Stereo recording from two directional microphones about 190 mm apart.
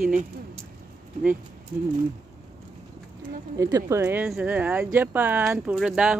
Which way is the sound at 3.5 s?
15° right (ahead or behind).